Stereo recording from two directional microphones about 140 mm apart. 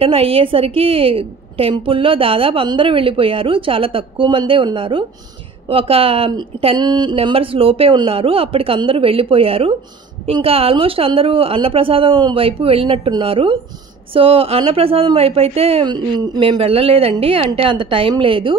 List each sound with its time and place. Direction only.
0.0 s a woman's voice: 45° right (ahead or behind)